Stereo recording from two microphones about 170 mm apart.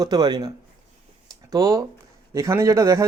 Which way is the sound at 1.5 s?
20° right (ahead or behind).